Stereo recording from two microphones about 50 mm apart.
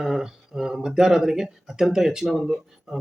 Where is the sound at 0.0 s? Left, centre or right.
Centre.